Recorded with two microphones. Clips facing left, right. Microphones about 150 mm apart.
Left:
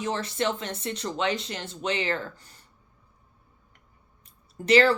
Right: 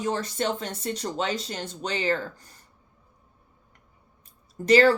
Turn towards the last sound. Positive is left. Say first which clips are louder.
# right 2 dB
turn(degrees=-45)  # may be behind; listen again after turning